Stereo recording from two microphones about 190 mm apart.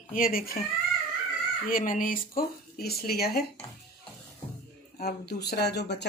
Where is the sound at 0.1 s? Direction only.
50° left (ahead or behind).